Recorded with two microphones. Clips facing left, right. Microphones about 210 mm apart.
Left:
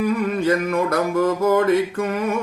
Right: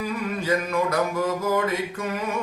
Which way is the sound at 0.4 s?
55° left (ahead or behind).